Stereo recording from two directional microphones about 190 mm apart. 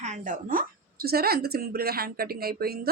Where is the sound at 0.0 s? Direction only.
40° right (ahead or behind).